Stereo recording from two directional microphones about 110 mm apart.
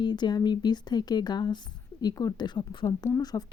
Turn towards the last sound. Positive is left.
turn(degrees=35)  # may be behind; listen again after turning